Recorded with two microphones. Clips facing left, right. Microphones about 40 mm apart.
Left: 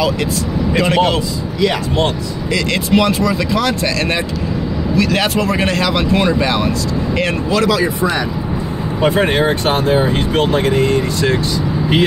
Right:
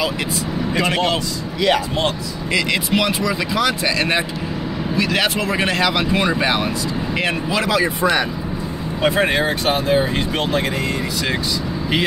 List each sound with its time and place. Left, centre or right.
0.7 s a man's voice: centre
2.7 s a man's voice: centre
6.4 s speech: right
7.2 s speech: centre
8.0 s speech: right
9.0 s a man's voice: centre